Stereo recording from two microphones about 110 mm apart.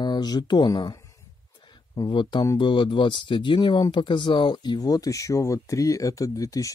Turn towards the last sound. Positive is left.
turn(degrees=30)  # may be behind; listen again after turning